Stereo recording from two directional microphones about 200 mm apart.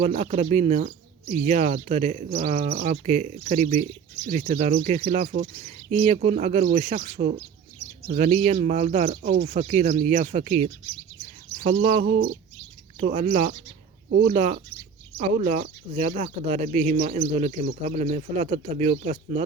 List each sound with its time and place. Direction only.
0.0 s speech: 35° right (ahead or behind)
9.3 s speech: 50° right (ahead or behind)
9.6 s speech: 35° right (ahead or behind)
11.5 s bird: 35° right (ahead or behind)
12.0 s bird: 60° right (ahead or behind)
13.0 s speech: 35° right (ahead or behind)